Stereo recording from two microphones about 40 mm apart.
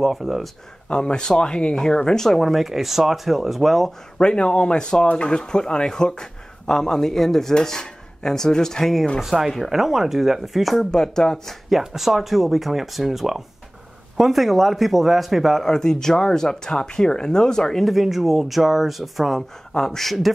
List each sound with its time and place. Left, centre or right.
0.0 s speech: centre
0.8 s speech: left; by 3.9 s centre
4.2 s speech: left
9.2 s speech: centre
10.8 s speech: centre
11.7 s speech: centre
15.6 s speech: centre
17.8 s speech: centre
19.8 s speech: centre